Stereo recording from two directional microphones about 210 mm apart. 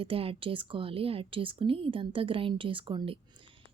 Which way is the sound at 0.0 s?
25° right (ahead or behind).